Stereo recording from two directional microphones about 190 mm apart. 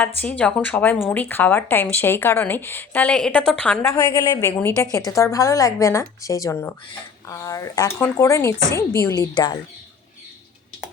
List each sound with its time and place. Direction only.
0.2 s a woman's voice: 10° left (ahead or behind)
3.8 s a woman's voice: 15° left (ahead or behind)